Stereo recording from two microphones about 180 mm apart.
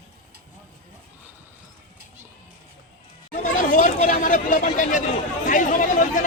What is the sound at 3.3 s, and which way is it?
Speech, 45° left (ahead or behind).